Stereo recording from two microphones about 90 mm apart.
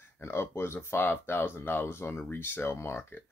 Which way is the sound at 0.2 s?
30° left (ahead or behind).